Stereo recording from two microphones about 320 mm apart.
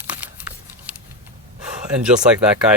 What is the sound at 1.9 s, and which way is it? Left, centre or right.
Speech, centre.